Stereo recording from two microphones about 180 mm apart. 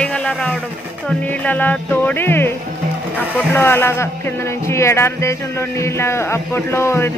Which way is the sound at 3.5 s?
10° left (ahead or behind).